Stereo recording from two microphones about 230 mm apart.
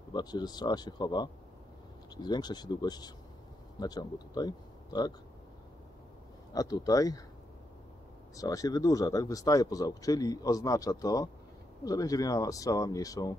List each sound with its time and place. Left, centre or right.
0.1 s speech: centre
6.5 s speech: centre
8.4 s speech: centre